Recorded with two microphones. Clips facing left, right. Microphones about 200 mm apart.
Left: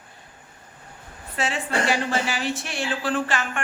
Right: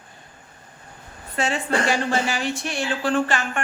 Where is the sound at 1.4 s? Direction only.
Centre (ahead or behind).